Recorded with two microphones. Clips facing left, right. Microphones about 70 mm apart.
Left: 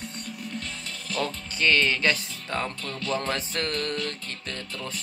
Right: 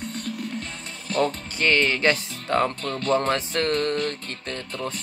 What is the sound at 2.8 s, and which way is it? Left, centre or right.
Speech, right.